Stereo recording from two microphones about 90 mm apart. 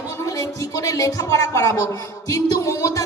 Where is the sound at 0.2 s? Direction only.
40° left (ahead or behind).